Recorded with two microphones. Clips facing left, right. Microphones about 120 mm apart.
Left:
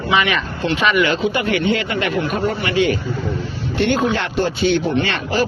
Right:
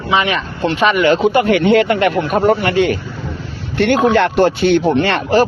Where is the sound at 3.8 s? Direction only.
60° right (ahead or behind).